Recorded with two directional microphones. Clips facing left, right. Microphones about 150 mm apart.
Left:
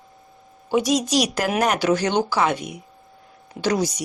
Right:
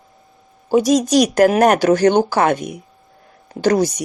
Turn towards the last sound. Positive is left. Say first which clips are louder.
# right 6 dB
turn(degrees=-50)  # may be behind; listen again after turning